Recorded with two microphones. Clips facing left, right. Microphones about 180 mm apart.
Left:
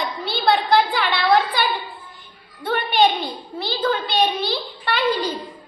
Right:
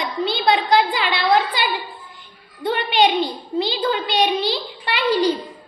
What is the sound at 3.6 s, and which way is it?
A woman's voice, 15° right (ahead or behind).